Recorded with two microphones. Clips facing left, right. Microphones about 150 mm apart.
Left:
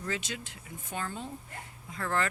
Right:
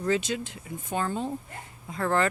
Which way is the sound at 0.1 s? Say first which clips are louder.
Right 11 dB; 25° right (ahead or behind).